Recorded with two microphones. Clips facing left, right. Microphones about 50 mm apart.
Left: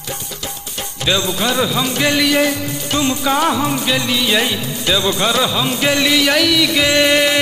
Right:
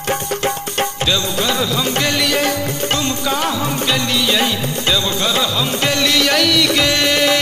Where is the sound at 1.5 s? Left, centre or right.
Centre.